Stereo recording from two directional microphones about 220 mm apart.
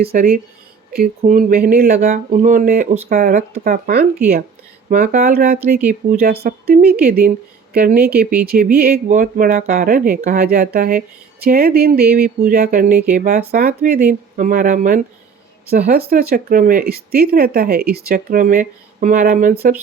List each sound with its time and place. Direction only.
0.0 s speech: 45° right (ahead or behind)